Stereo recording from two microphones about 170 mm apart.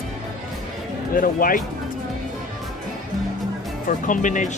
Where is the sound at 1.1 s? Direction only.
55° left (ahead or behind).